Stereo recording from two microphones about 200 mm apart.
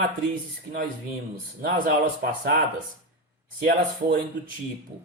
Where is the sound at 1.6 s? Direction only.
50° right (ahead or behind).